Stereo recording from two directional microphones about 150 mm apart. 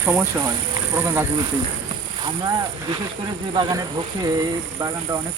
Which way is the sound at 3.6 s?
25° right (ahead or behind).